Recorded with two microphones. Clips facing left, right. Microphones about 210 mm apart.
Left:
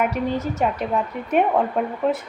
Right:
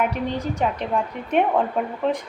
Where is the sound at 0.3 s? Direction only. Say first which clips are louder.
Left 2 dB; 5° left (ahead or behind).